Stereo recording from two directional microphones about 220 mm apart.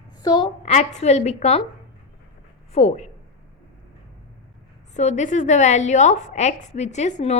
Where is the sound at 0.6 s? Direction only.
30° left (ahead or behind).